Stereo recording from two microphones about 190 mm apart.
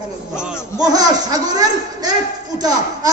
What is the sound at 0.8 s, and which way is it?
A man's voice, 20° right (ahead or behind).